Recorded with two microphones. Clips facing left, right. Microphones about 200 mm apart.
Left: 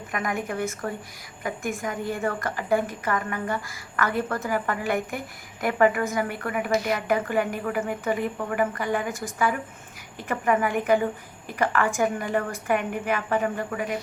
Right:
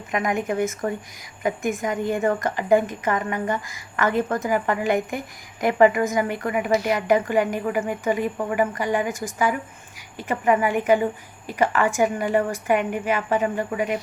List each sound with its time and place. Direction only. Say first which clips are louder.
0.1 s a woman's voice: right 5 dB; 20° right (ahead or behind)